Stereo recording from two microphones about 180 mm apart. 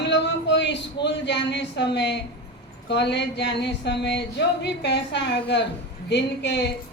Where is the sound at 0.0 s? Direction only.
75° left (ahead or behind).